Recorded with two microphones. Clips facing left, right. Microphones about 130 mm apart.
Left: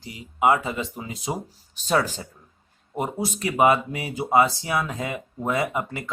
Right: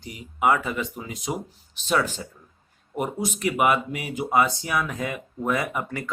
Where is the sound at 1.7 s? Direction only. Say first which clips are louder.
Left 1 dB; 40° left (ahead or behind).